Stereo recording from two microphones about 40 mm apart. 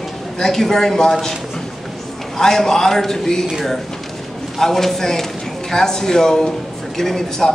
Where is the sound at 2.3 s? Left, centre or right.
Centre.